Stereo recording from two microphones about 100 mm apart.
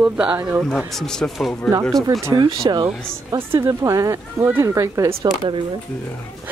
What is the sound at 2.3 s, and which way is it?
Speech, 50° right (ahead or behind).